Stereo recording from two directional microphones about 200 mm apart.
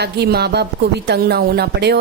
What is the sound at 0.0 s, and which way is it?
A woman's voice, 55° right (ahead or behind).